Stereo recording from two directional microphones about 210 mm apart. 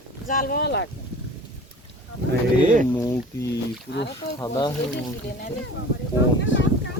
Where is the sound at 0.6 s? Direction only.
55° left (ahead or behind).